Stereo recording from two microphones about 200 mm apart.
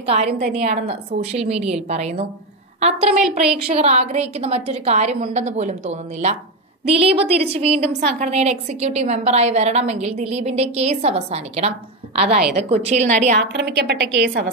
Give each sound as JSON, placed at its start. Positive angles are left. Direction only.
{"t": 0.6, "sound": "a woman's voice", "side_deg": -30}
{"t": 3.1, "sound": "a woman's voice", "side_deg": -5}
{"t": 3.7, "sound": "a woman's voice", "side_deg": -30}
{"t": 12.2, "sound": "a woman's voice", "side_deg": -5}
{"t": 12.6, "sound": "a woman's voice", "side_deg": -30}
{"t": 13.4, "sound": "a woman's voice", "side_deg": -60}